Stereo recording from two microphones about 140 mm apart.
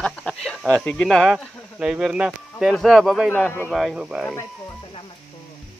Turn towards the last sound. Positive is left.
turn(degrees=-5)  # may be behind; listen again after turning